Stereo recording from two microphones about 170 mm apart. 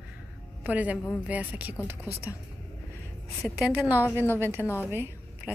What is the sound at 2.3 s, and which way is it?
Speech, 20° left (ahead or behind).